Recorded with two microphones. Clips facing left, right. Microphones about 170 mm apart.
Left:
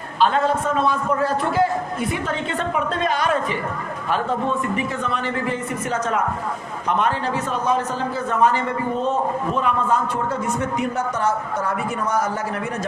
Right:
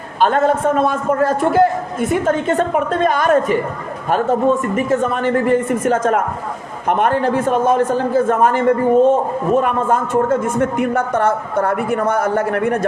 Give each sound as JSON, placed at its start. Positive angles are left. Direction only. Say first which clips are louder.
{"t": 0.2, "sound": "a man's voice", "louder": "right 4 dB", "side_deg": -50}